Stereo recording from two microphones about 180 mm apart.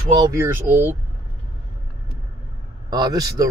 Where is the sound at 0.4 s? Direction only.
10° right (ahead or behind).